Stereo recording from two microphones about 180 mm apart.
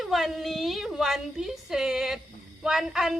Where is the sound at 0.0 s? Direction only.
Centre (ahead or behind).